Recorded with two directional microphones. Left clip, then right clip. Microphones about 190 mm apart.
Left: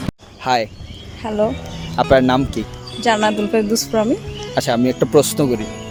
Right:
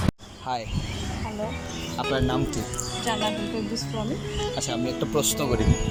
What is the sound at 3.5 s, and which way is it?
Speech, 55° left (ahead or behind).